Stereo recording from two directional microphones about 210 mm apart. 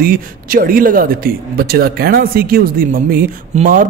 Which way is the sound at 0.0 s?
45° right (ahead or behind).